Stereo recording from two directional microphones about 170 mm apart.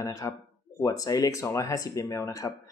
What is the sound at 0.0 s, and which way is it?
Speech, 20° left (ahead or behind).